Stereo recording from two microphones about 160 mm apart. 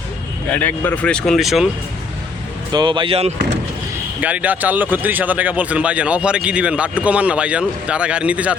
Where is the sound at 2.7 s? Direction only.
25° right (ahead or behind).